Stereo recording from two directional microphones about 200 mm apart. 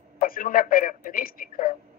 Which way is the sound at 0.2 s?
45° left (ahead or behind).